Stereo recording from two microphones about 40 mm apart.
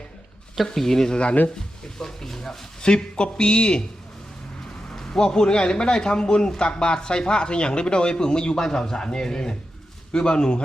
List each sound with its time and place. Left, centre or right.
0.8 s a man's voice: centre
2.0 s a man's voice: centre
4.9 s a man's voice: centre